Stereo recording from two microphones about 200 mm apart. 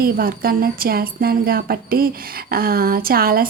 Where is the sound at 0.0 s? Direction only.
45° right (ahead or behind).